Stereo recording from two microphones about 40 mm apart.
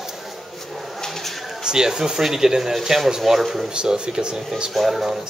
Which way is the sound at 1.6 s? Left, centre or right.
Centre.